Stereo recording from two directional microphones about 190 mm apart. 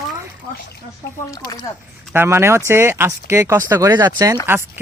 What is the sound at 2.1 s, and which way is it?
Speech, 15° right (ahead or behind).